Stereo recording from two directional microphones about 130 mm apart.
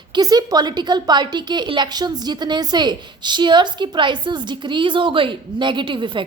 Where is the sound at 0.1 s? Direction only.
30° right (ahead or behind).